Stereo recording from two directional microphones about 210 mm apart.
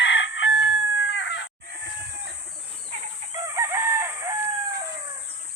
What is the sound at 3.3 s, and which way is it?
Chicken, 15° right (ahead or behind).